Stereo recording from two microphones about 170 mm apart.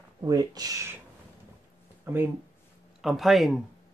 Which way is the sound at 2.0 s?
10° right (ahead or behind).